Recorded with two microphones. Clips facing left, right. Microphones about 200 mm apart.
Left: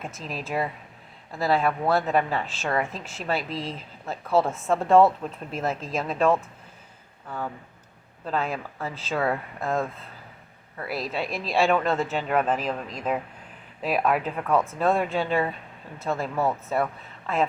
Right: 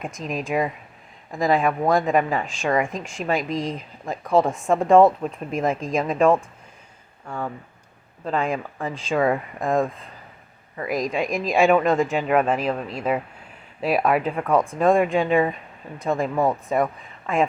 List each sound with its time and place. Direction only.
0.3 s speech: 15° right (ahead or behind)
8.4 s speech: 15° right (ahead or behind)